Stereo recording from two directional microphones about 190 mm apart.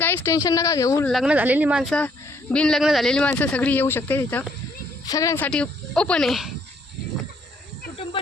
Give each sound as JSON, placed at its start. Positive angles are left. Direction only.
{"t": 0.0, "sound": "speech", "side_deg": 10}
{"t": 1.0, "sound": "speech", "side_deg": 0}
{"t": 5.5, "sound": "speech", "side_deg": 5}